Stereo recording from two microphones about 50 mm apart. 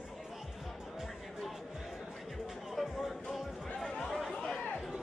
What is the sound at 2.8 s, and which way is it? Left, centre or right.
Music, centre.